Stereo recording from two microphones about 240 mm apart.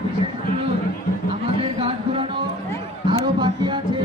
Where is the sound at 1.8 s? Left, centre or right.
Right.